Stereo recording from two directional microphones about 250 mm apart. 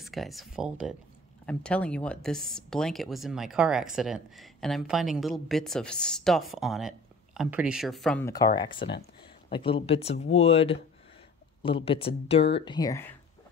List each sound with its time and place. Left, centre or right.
0.0 s a woman's voice: centre
8.7 s speech: left
9.2 s speech: left